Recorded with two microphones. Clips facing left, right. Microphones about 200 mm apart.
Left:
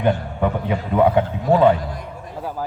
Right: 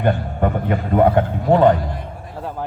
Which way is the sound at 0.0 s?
50° right (ahead or behind).